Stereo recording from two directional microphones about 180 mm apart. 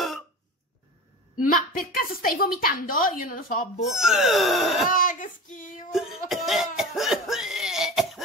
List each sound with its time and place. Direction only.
1.3 s speech: 50° left (ahead or behind)
3.8 s speech: 5° right (ahead or behind)
4.8 s speech: 50° left (ahead or behind)
5.9 s cough: centre (ahead or behind)